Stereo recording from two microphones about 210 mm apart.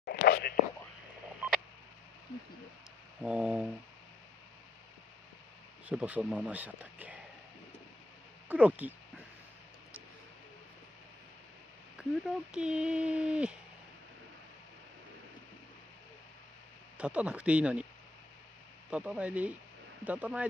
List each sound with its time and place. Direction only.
0.0 s whispering: 45° left (ahead or behind)
3.2 s speech: 5° right (ahead or behind)
5.9 s speech: 5° right (ahead or behind)
8.5 s speech: 5° right (ahead or behind)
12.0 s speech: 5° right (ahead or behind)
17.0 s speech: 5° right (ahead or behind)
18.9 s speech: 5° right (ahead or behind)